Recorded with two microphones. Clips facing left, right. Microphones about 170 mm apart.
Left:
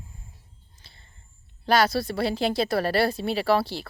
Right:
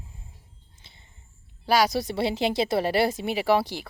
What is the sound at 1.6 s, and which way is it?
Speech, 10° right (ahead or behind).